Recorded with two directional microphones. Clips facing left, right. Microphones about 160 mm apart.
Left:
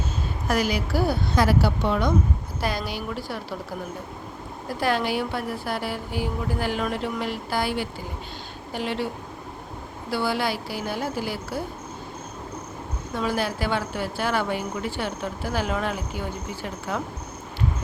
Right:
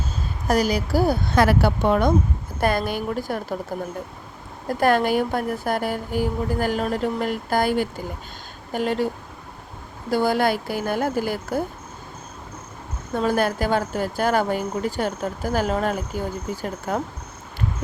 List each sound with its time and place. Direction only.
0.4 s speech: 40° right (ahead or behind)
4.7 s speech: 50° right (ahead or behind)
10.1 s speech: 45° right (ahead or behind)
13.1 s speech: 50° right (ahead or behind)